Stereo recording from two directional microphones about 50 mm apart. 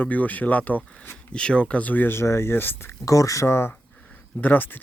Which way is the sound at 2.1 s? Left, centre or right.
Left.